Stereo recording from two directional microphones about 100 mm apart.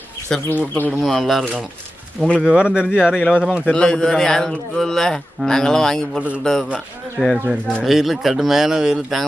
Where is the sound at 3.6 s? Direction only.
10° left (ahead or behind).